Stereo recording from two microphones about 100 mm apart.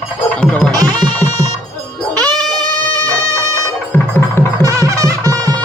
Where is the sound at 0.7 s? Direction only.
40° right (ahead or behind).